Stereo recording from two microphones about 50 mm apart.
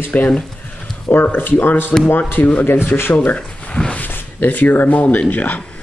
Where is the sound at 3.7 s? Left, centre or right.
Centre.